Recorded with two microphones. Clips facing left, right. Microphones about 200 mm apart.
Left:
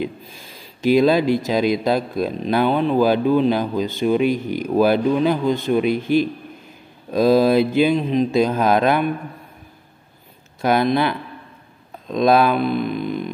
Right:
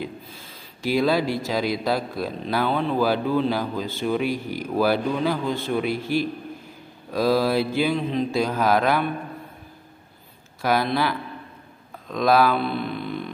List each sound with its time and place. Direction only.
0.0 s speech: 15° left (ahead or behind)
10.6 s speech: 20° left (ahead or behind)